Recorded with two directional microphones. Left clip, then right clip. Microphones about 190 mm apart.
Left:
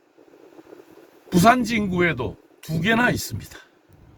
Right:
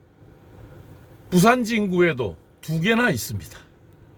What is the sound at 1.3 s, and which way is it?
Speech, 15° right (ahead or behind).